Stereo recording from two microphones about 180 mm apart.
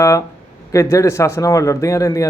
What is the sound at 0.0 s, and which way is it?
Speech, 15° left (ahead or behind).